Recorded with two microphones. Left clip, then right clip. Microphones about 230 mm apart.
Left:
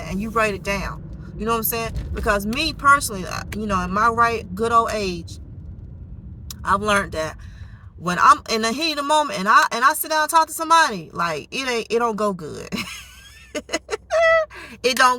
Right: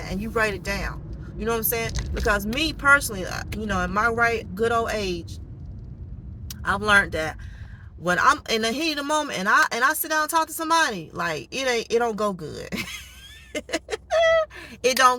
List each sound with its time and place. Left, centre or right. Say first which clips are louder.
0.0 s speech: left 3 dB; centre
6.6 s speech: even; centre
13.5 s a sound: left 2 dB; centre